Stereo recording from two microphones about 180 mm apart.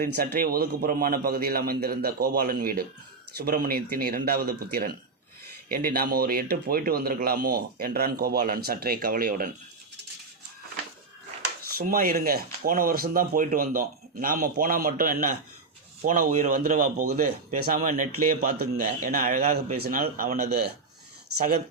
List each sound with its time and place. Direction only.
0.0 s speech: 55° right (ahead or behind)
11.7 s speech: 55° right (ahead or behind)
19.7 s speech: 55° right (ahead or behind)